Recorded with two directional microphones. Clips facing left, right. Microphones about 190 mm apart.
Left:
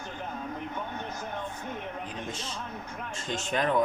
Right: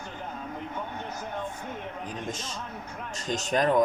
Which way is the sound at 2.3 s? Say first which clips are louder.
Right 1 dB; 45° right (ahead or behind).